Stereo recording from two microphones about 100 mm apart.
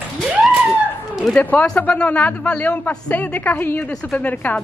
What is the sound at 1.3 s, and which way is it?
Speech, 15° left (ahead or behind).